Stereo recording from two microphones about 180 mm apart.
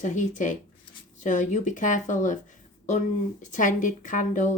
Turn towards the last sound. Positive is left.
turn(degrees=45)  # may be behind; listen again after turning